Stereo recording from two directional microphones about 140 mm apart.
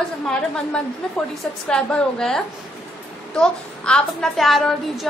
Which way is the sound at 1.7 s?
5° left (ahead or behind).